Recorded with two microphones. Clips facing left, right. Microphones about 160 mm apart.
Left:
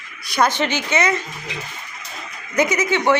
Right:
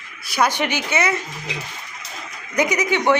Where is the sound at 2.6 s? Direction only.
15° right (ahead or behind).